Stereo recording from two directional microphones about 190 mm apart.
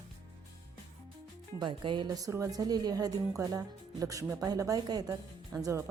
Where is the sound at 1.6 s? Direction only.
25° right (ahead or behind).